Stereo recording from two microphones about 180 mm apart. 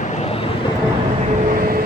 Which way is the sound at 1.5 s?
55° right (ahead or behind).